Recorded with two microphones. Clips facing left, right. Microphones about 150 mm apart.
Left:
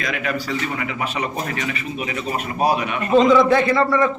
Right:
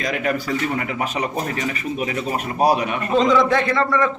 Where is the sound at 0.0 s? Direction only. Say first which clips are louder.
Right 2 dB; 40° right (ahead or behind).